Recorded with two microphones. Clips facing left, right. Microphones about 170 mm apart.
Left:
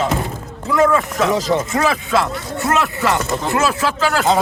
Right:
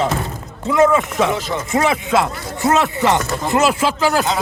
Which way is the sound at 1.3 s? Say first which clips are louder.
Left 5 dB; 35° left (ahead or behind).